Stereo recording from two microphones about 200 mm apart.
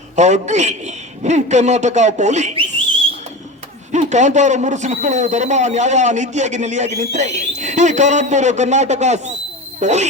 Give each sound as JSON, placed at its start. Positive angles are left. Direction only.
{"t": 0.2, "sound": "a man's voice", "side_deg": -35}
{"t": 3.9, "sound": "a man's voice", "side_deg": -35}